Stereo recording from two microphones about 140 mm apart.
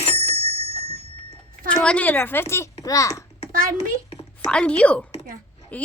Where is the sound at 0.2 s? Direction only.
45° right (ahead or behind).